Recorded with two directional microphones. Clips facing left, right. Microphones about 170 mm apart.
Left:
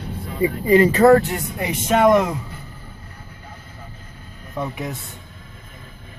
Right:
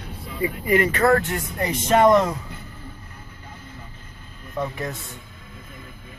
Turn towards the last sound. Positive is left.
turn(degrees=5)  # may be behind; listen again after turning